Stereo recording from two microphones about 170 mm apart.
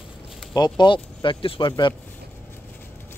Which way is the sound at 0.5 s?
25° left (ahead or behind).